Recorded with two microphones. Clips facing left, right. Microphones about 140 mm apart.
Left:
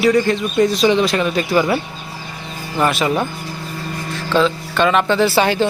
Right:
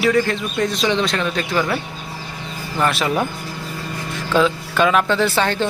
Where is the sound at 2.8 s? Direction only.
Centre (ahead or behind).